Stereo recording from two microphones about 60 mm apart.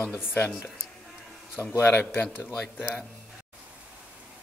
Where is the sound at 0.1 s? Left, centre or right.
Left.